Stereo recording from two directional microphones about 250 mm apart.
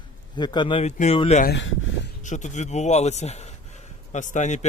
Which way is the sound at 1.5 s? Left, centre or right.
Left.